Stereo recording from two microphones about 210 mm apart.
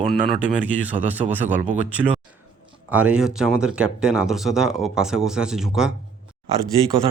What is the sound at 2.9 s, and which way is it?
Speech, 5° right (ahead or behind).